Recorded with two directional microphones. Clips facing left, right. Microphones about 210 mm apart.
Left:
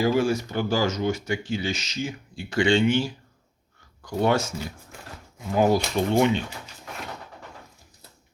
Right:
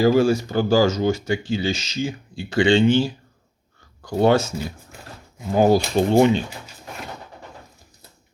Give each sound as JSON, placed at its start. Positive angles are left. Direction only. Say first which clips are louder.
{"t": 0.0, "sound": "speech", "louder": "right 5 dB", "side_deg": -35}
{"t": 5.5, "sound": "speech", "louder": "right 4 dB", "side_deg": -30}